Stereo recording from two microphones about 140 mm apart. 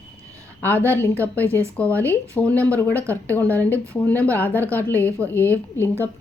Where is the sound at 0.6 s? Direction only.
15° left (ahead or behind).